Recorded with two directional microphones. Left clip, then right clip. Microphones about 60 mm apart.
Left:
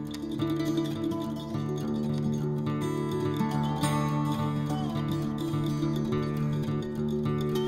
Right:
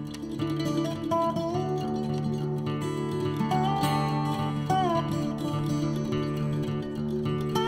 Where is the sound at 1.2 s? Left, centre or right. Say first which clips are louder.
Right 8 dB; right.